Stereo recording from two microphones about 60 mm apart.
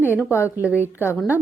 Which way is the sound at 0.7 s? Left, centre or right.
Left.